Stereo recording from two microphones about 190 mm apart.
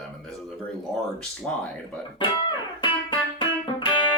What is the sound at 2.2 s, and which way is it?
Music, 25° left (ahead or behind).